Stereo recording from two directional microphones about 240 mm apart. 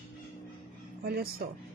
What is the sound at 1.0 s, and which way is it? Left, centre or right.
Speech, right.